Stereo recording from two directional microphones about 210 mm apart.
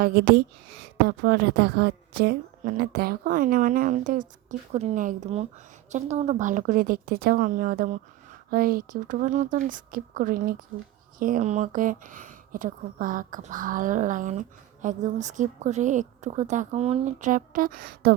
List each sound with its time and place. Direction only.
0.0 s a woman's voice: 50° right (ahead or behind)